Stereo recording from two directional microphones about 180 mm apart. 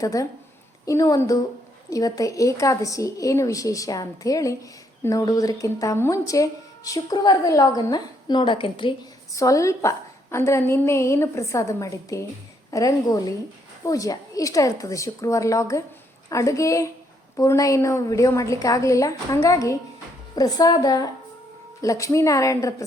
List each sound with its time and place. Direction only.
0.0 s a woman's voice: 20° left (ahead or behind)